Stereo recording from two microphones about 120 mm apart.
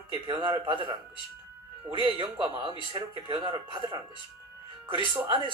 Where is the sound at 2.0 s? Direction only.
45° right (ahead or behind).